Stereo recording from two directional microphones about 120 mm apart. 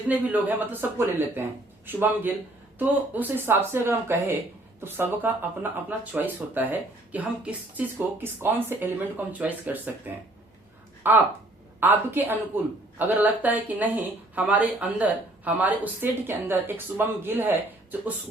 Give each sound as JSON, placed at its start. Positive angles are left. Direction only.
{"t": 0.1, "sound": "speech", "side_deg": -15}
{"t": 11.1, "sound": "speech", "side_deg": -15}